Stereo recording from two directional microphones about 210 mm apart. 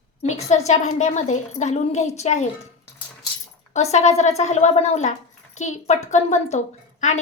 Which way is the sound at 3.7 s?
30° left (ahead or behind).